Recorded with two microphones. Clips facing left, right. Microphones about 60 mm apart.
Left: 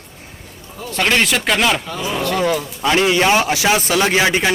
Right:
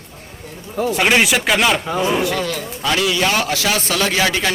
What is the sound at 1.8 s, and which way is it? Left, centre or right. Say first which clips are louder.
Speech: right 4 dB; right.